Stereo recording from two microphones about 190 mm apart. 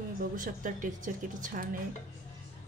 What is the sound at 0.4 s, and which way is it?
A woman's voice, 45° right (ahead or behind).